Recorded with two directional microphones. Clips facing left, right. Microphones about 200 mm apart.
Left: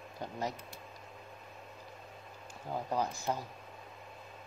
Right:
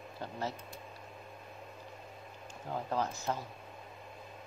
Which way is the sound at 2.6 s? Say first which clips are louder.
Even; 10° left (ahead or behind).